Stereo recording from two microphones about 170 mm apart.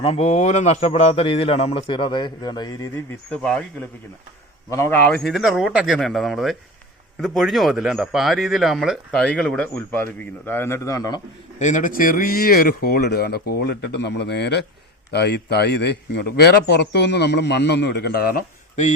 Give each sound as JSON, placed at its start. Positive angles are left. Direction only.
{"t": 0.0, "sound": "speech", "side_deg": 35}
{"t": 3.2, "sound": "speech", "side_deg": 5}
{"t": 4.7, "sound": "speech", "side_deg": 15}
{"t": 5.1, "sound": "speech", "side_deg": 0}
{"t": 11.6, "sound": "speech", "side_deg": 50}